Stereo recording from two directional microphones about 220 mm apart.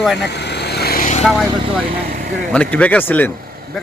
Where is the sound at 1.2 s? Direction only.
5° left (ahead or behind).